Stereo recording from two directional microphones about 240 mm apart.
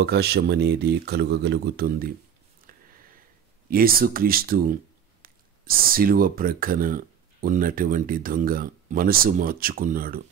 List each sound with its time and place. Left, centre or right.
0.0 s speech: right
2.7 s a sound: right
3.7 s speech: right